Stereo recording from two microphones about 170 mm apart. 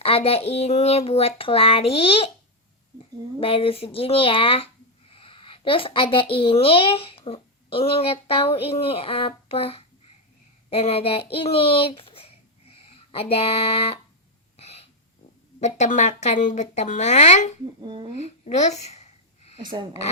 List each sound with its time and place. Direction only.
0.0 s a child's voice: 35° left (ahead or behind)
3.4 s a child's voice: 35° left (ahead or behind)
5.1 s a sound: 30° left (ahead or behind)
6.3 s a child's voice: 35° left (ahead or behind)
15.6 s a woman's voice: 45° left (ahead or behind)
17.7 s speech: 25° right (ahead or behind)
18.2 s speech: 45° left (ahead or behind)